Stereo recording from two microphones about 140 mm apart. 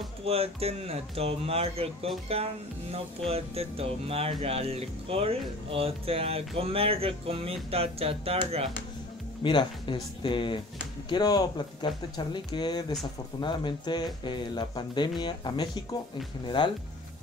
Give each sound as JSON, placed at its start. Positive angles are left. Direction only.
{"t": 0.2, "sound": "speech", "side_deg": -45}
{"t": 9.4, "sound": "speech", "side_deg": 35}